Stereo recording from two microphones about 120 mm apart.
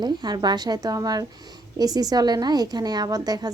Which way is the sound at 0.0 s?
35° right (ahead or behind).